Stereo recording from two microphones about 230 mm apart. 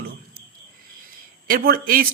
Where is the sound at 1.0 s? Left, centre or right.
Right.